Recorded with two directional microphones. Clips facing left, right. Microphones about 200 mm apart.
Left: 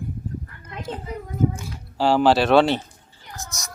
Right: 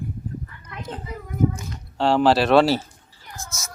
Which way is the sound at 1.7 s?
Centre (ahead or behind).